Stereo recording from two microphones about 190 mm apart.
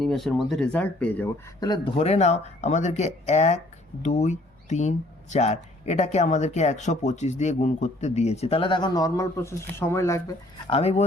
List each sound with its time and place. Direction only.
0.0 s speech: centre (ahead or behind)
1.6 s speech: 25° left (ahead or behind)
10.7 s speech: 35° left (ahead or behind)